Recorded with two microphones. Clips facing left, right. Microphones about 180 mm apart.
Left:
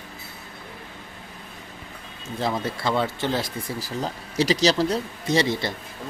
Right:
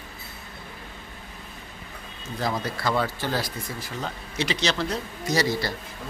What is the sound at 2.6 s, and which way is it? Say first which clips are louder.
Speech: left 1 dB; 25° left (ahead or behind).